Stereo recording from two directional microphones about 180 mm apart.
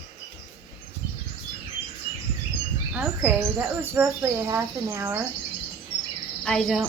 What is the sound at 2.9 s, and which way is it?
Speech, 5° right (ahead or behind).